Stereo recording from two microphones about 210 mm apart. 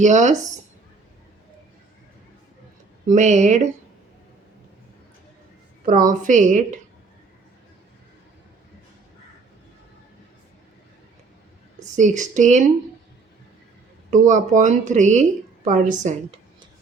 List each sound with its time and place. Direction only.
0.0 s a woman's voice: 35° right (ahead or behind)
3.1 s a woman's voice: 35° right (ahead or behind)
5.9 s a woman's voice: 40° right (ahead or behind)
11.8 s a woman's voice: 35° right (ahead or behind)
14.1 s a woman's voice: 35° right (ahead or behind)